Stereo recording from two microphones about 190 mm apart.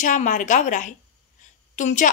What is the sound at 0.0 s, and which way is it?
A woman's voice, 40° left (ahead or behind).